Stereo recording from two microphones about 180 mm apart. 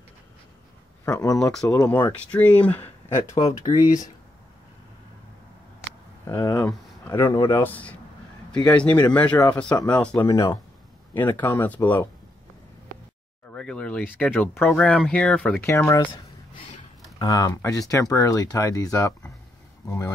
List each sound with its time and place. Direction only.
1.0 s speech: 20° left (ahead or behind)
1.4 s speech: 5° left (ahead or behind)
1.7 s speech: 15° left (ahead or behind)
2.1 s speech: 5° left (ahead or behind)
6.2 s speech: 20° left (ahead or behind)
7.6 s speech: 10° left (ahead or behind)
10.2 s speech: 20° left (ahead or behind)
13.5 s speech: 5° left (ahead or behind)
17.2 s speech: 20° left (ahead or behind)